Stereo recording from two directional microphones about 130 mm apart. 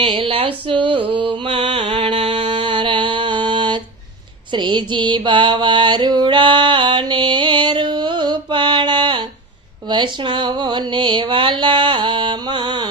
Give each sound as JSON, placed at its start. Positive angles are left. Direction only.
{"t": 0.0, "sound": "speech", "side_deg": -45}
{"t": 1.1, "sound": "music", "side_deg": -45}
{"t": 4.5, "sound": "mantra", "side_deg": -35}
{"t": 9.9, "sound": "a sound", "side_deg": -35}